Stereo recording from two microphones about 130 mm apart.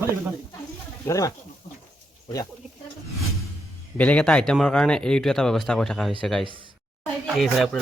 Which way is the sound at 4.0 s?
10° left (ahead or behind).